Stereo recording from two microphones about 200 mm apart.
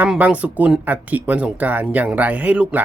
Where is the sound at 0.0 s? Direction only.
5° right (ahead or behind).